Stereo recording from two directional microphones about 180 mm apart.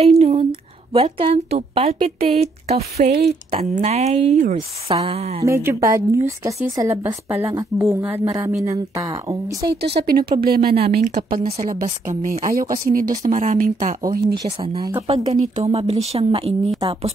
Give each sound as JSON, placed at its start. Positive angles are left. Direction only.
{"t": 0.0, "sound": "a sound", "side_deg": -35}
{"t": 0.9, "sound": "a woman's voice", "side_deg": -30}
{"t": 3.1, "sound": "speech", "side_deg": -65}
{"t": 3.5, "sound": "a woman's voice", "side_deg": -35}
{"t": 5.4, "sound": "a woman's voice", "side_deg": -15}
{"t": 9.7, "sound": "speech", "side_deg": -65}
{"t": 11.4, "sound": "a woman's voice", "side_deg": -35}
{"t": 11.7, "sound": "speech", "side_deg": -45}
{"t": 13.2, "sound": "a woman's voice", "side_deg": -40}
{"t": 14.4, "sound": "a woman's voice", "side_deg": -30}